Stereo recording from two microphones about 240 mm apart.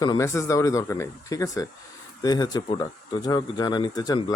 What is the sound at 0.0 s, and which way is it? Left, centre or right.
Speech, centre.